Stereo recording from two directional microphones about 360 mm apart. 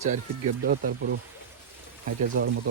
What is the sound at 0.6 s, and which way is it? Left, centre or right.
Speech, right.